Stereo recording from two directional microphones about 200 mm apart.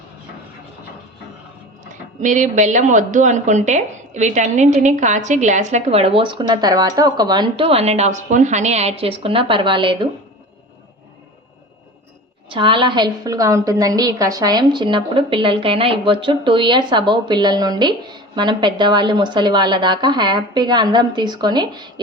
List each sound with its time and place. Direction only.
1.9 s speech: 40° right (ahead or behind)
12.5 s a woman's voice: 25° right (ahead or behind)